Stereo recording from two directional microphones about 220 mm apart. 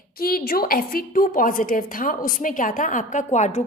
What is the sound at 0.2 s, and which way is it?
A woman's voice, 45° left (ahead or behind).